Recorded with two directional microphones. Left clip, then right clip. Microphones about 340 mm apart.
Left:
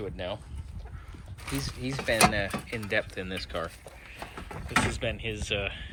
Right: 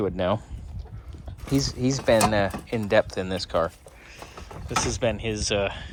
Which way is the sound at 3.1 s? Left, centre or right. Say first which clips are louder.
Right 8 dB; centre.